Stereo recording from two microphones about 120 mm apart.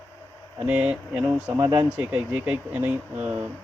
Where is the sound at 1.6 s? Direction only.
40° right (ahead or behind).